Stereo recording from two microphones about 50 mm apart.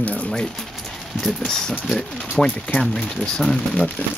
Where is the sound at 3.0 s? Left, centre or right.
Centre.